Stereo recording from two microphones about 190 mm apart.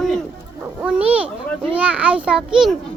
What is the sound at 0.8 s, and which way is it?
A child's voice, 5° right (ahead or behind).